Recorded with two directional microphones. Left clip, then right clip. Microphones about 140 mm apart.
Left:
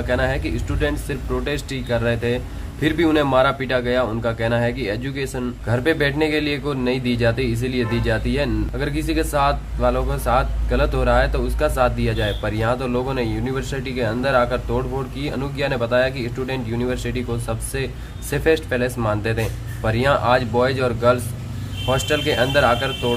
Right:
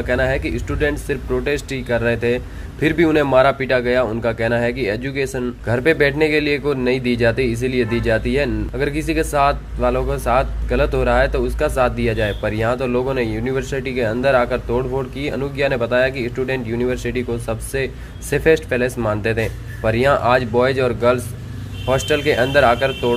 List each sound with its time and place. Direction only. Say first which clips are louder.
0.0 s speech: right 3 dB; 25° right (ahead or behind)